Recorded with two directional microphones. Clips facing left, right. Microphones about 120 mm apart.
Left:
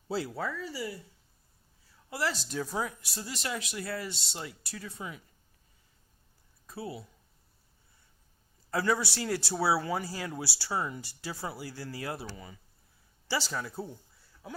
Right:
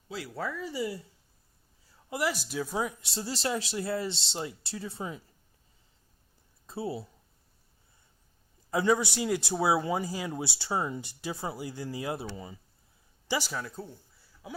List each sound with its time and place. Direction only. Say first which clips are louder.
0.1 s speech: left 6 dB; 30° left (ahead or behind)
0.5 s speech: right 4 dB; 20° right (ahead or behind)
2.0 s speech: right 2 dB; 15° right (ahead or behind)
2.8 s speech: right 4 dB; 20° right (ahead or behind)
6.7 s speech: right 5 dB; 25° right (ahead or behind)
8.7 s a man's voice: right 3 dB; 20° right (ahead or behind)
13.5 s speech: even; centre (ahead or behind)
13.7 s speech: left 3 dB; 15° left (ahead or behind)
14.4 s speech: right 1 dB; 5° right (ahead or behind)